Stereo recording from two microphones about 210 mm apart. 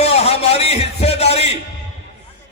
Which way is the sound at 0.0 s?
30° left (ahead or behind).